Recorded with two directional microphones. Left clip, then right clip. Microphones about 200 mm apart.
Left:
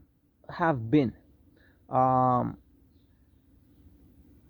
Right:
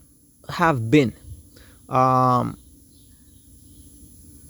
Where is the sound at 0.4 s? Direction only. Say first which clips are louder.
Right 7 dB; 40° right (ahead or behind).